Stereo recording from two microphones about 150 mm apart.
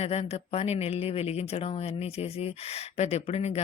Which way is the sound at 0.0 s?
45° left (ahead or behind).